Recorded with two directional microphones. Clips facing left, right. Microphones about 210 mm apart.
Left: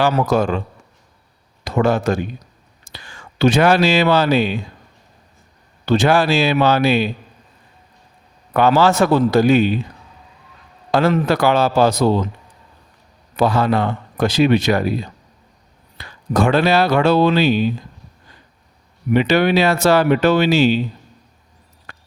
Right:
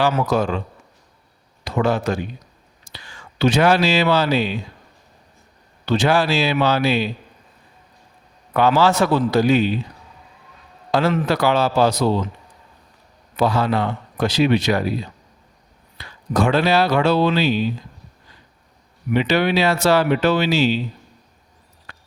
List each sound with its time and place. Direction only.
0.0 s speech: 40° left (ahead or behind)
1.6 s speech: 45° left (ahead or behind)
5.8 s speech: 50° left (ahead or behind)
8.5 s speech: 50° left (ahead or behind)
11.1 s speech: 50° left (ahead or behind)
13.3 s speech: 50° left (ahead or behind)
16.0 s speech: 50° left (ahead or behind)
19.1 s speech: 50° left (ahead or behind)
21.9 s a sound: 50° left (ahead or behind)